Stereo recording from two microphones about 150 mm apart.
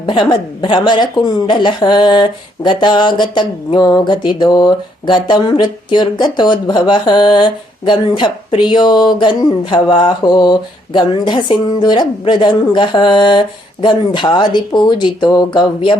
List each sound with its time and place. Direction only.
0.0 s a woman's voice: 30° left (ahead or behind)